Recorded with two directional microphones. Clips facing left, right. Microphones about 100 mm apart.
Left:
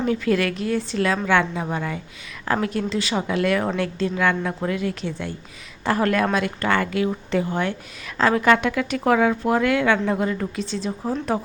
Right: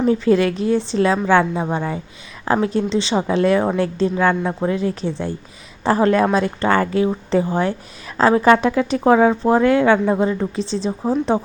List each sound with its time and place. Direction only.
0.0 s a woman's voice: 30° right (ahead or behind)